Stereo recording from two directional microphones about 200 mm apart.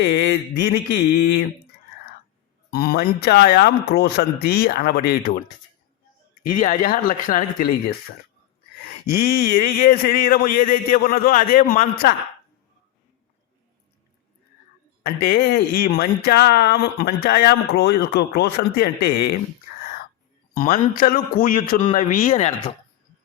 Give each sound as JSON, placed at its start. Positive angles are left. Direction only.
{"t": 0.0, "sound": "a sound", "side_deg": 55}
{"t": 2.6, "sound": "speech", "side_deg": 50}
{"t": 6.4, "sound": "speech", "side_deg": 40}
{"t": 9.0, "sound": "speech", "side_deg": 50}
{"t": 15.0, "sound": "speech", "side_deg": 50}